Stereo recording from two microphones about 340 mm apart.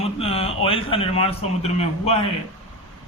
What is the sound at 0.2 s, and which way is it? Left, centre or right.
A man's voice, centre.